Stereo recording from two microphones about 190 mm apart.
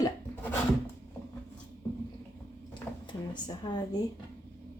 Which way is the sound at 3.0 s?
25° left (ahead or behind).